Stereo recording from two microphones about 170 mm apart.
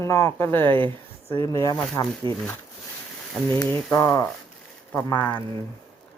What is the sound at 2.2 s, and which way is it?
Speech, 30° right (ahead or behind).